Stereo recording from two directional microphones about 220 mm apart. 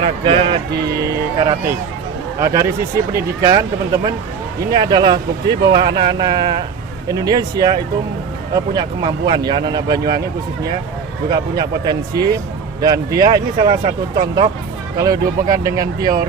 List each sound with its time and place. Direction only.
0.0 s speech: 25° right (ahead or behind)
11.3 s speech: 20° right (ahead or behind)
13.8 s speech: 30° right (ahead or behind)
14.9 s speech: 15° right (ahead or behind)